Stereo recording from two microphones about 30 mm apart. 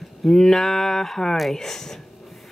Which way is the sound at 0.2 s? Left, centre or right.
Centre.